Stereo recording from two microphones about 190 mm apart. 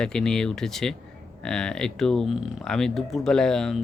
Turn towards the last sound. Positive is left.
turn(degrees=0)  # may be behind; listen again after turning